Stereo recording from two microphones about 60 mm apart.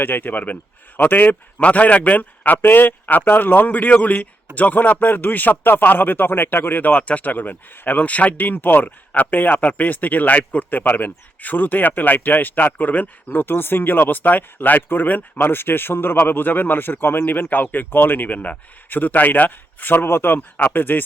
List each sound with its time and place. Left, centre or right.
0.0 s a man's voice: left